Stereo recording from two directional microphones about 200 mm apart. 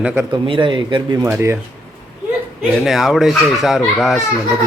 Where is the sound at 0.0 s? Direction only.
10° right (ahead or behind).